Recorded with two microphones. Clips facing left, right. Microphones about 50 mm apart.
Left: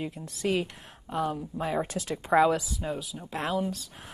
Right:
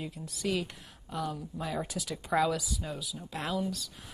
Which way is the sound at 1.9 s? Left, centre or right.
Left.